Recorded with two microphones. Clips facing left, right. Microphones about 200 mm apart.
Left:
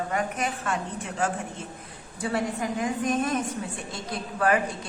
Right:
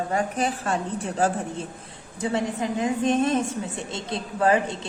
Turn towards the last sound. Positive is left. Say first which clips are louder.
# right 3 dB
turn(degrees=-25)  # may be behind; listen again after turning